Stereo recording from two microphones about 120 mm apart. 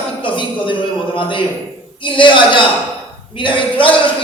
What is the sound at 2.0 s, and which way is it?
A man's voice, 45° left (ahead or behind).